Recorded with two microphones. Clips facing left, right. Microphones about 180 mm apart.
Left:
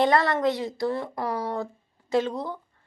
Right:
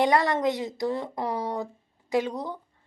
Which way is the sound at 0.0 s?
15° right (ahead or behind).